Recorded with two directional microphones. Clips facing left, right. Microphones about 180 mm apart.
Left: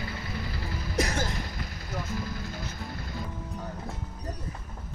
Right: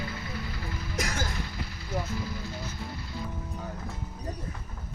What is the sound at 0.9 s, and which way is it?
Music, 35° left (ahead or behind).